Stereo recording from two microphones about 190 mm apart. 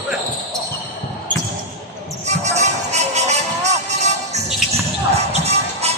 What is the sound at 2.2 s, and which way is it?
Music, 35° right (ahead or behind).